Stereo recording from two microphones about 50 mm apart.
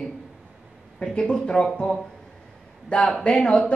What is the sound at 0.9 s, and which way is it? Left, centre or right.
Speech, centre.